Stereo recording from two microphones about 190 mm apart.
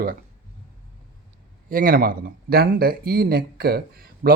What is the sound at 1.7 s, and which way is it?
Speech, 50° right (ahead or behind).